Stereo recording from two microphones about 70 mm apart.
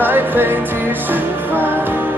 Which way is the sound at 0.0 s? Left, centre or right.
Right.